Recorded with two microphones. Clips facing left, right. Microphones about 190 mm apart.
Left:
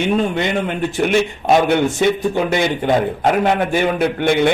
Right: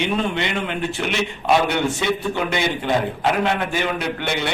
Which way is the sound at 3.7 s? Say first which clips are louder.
Left 7 dB; 50° left (ahead or behind).